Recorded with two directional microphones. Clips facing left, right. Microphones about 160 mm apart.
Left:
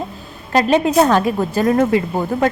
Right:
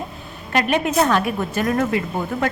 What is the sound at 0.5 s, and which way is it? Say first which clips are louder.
Speech: left 5 dB; 35° left (ahead or behind).